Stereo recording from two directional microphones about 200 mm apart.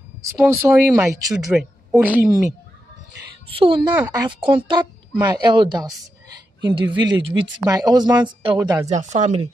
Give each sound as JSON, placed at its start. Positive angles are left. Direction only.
{"t": 0.6, "sound": "speech", "side_deg": -15}
{"t": 3.4, "sound": "speech", "side_deg": -25}
{"t": 3.9, "sound": "speech", "side_deg": -15}
{"t": 8.8, "sound": "speech", "side_deg": -35}